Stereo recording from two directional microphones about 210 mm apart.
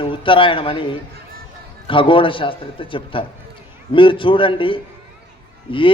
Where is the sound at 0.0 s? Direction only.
25° left (ahead or behind).